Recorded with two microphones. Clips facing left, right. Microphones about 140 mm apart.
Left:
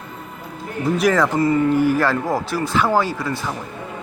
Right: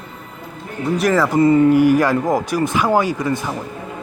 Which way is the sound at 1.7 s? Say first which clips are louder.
Right 4 dB; 15° right (ahead or behind).